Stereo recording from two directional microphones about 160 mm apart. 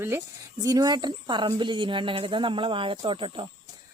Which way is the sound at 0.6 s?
25° right (ahead or behind).